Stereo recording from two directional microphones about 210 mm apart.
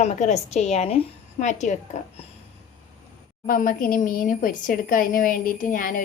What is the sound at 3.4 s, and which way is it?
A woman's voice, 40° left (ahead or behind).